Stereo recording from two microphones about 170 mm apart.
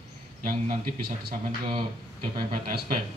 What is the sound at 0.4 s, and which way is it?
Speech, 55° right (ahead or behind).